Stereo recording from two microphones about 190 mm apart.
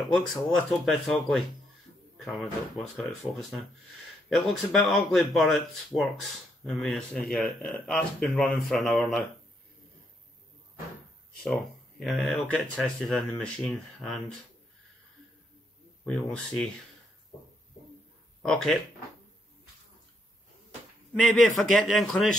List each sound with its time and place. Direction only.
0.0 s speech: centre (ahead or behind)
6.6 s speech: centre (ahead or behind)
11.4 s speech: centre (ahead or behind)
16.0 s speech: 5° left (ahead or behind)
18.4 s speech: 5° left (ahead or behind)
21.1 s speech: 5° left (ahead or behind)